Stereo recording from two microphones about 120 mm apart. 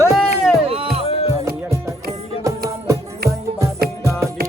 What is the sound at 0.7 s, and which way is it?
Music, 55° right (ahead or behind).